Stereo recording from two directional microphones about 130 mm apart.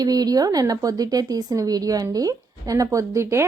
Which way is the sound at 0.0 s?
30° right (ahead or behind).